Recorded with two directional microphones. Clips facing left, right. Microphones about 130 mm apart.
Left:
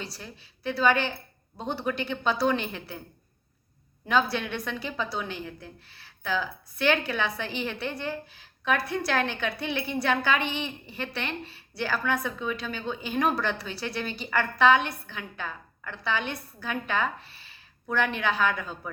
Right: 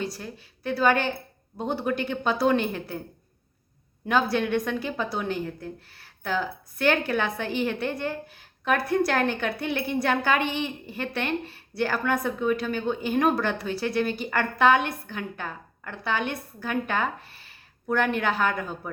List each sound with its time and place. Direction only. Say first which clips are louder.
0.0 s a woman's voice: right 7 dB; 50° right (ahead or behind)
4.1 s a woman's voice: right 3 dB; 45° right (ahead or behind)
18.6 s speech: right 4 dB; 15° right (ahead or behind)